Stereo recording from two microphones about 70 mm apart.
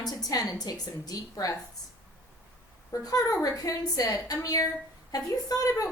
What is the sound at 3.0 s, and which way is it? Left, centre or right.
A woman's voice, left.